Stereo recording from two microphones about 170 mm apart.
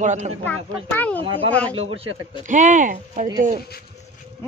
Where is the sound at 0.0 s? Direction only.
45° right (ahead or behind).